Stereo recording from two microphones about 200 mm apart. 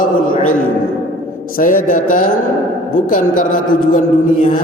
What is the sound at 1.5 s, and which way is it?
Speech, 40° left (ahead or behind).